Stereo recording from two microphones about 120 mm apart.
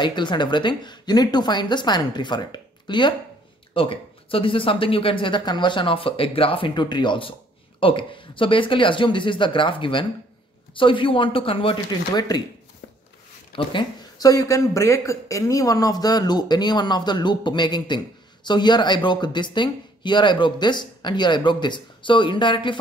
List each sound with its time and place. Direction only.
0.0 s speech: 40° left (ahead or behind)
13.5 s speech: 45° left (ahead or behind)
14.1 s speech: 30° left (ahead or behind)